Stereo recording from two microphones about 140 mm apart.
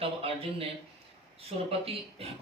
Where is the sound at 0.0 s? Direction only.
45° right (ahead or behind).